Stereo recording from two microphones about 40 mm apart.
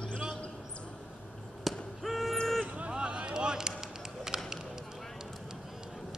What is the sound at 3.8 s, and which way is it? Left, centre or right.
Run, centre.